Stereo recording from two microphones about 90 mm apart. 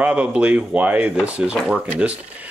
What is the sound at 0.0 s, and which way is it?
Speech, 15° right (ahead or behind).